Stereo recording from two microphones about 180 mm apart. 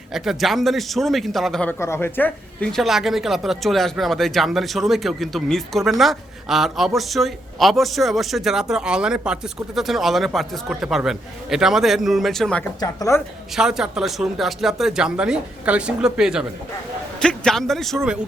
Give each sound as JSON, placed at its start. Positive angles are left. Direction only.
{"t": 0.1, "sound": "speech", "side_deg": 0}
{"t": 1.8, "sound": "speech", "side_deg": 15}
{"t": 12.8, "sound": "a woman's voice", "side_deg": 15}
{"t": 13.6, "sound": "speech", "side_deg": -5}